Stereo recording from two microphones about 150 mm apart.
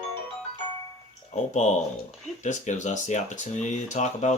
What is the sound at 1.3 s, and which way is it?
Speech, 50° left (ahead or behind).